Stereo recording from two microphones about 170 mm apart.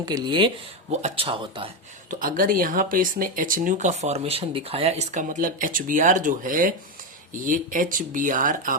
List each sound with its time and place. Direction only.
0.0 s speech: 25° right (ahead or behind)
0.9 s speech: 35° right (ahead or behind)
2.0 s speech: 55° right (ahead or behind)